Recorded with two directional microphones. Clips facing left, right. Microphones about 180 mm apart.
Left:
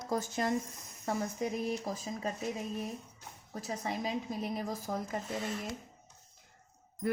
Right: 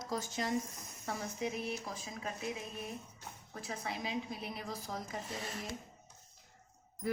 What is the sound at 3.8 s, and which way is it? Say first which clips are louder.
A woman's voice: left 3 dB; 40° left (ahead or behind).